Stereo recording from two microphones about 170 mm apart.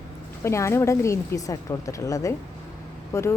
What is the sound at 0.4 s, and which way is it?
Speech, 15° left (ahead or behind).